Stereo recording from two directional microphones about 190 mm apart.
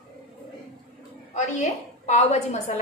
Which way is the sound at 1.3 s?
35° left (ahead or behind).